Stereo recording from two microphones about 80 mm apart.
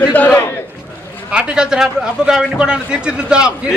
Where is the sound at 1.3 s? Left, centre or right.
Centre.